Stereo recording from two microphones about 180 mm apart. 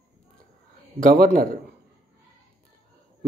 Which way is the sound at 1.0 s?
50° right (ahead or behind).